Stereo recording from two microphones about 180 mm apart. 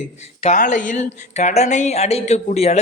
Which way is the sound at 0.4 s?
45° left (ahead or behind).